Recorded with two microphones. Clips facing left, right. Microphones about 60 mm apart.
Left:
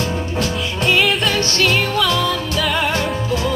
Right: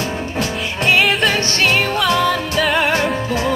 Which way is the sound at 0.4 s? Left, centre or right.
Right.